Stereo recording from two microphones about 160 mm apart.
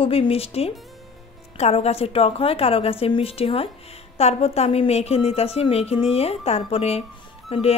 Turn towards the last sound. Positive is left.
turn(degrees=40)  # may be behind; listen again after turning